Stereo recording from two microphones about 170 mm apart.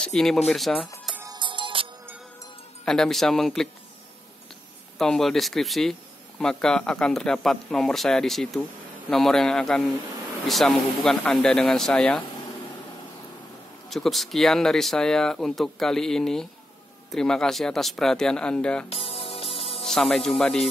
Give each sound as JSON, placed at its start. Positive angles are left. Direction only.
{"t": 0.0, "sound": "speech", "side_deg": 5}
{"t": 1.2, "sound": "music", "side_deg": -25}
{"t": 2.8, "sound": "speech", "side_deg": 5}
{"t": 4.9, "sound": "speech", "side_deg": 0}
{"t": 13.8, "sound": "speech", "side_deg": 0}
{"t": 18.9, "sound": "music", "side_deg": 35}
{"t": 19.8, "sound": "speech", "side_deg": 5}